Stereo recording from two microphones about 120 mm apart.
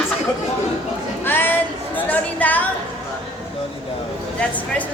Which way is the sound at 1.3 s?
15° left (ahead or behind).